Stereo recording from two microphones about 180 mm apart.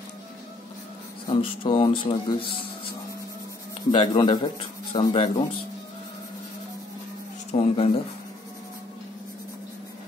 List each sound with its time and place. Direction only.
1.2 s speech: 30° left (ahead or behind)
3.9 s speech: 25° left (ahead or behind)
7.5 s speech: 35° left (ahead or behind)